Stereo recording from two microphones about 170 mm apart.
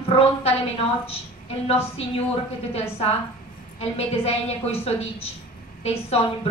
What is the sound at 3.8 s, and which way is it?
Speech, 35° left (ahead or behind).